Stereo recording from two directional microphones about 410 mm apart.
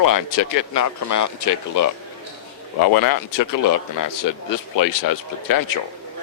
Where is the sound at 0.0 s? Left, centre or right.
Left.